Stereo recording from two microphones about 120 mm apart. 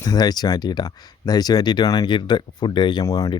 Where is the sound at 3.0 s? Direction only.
25° left (ahead or behind).